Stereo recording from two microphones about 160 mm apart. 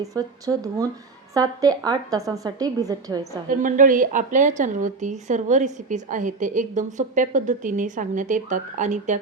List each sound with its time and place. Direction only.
0.0 s a woman's voice: 20° right (ahead or behind)
3.5 s a woman's voice: 55° right (ahead or behind)